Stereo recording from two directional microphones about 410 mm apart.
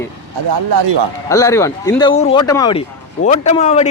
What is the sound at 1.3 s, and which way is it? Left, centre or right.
A man's voice, centre.